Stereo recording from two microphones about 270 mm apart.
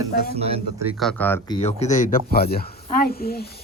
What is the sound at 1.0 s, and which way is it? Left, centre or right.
Speech, centre.